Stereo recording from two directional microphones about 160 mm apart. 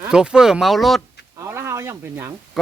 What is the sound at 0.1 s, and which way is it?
Speech, 5° right (ahead or behind).